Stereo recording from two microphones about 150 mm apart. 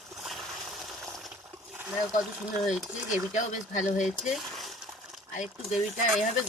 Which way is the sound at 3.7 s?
55° left (ahead or behind).